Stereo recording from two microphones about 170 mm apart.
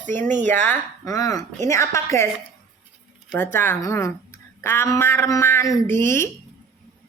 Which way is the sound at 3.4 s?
10° left (ahead or behind).